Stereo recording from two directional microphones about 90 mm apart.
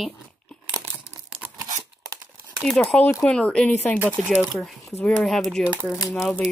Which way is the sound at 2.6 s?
5° left (ahead or behind).